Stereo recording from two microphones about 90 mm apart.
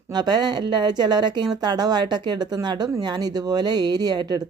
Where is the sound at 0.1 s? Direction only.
50° right (ahead or behind).